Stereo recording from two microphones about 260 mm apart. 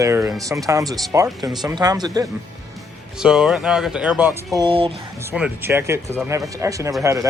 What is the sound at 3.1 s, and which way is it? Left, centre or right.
Speech, centre.